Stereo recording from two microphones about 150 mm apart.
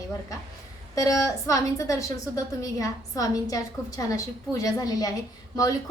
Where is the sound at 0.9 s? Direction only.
20° left (ahead or behind).